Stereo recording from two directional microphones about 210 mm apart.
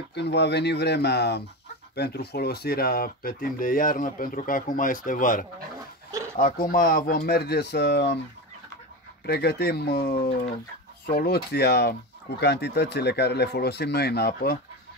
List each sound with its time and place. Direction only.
0.1 s speech: 55° left (ahead or behind)
9.2 s speech: 50° left (ahead or behind)